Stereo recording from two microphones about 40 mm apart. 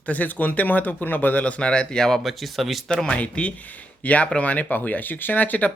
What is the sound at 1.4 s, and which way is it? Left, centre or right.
Speech, left.